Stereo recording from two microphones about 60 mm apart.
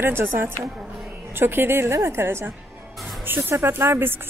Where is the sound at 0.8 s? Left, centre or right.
Centre.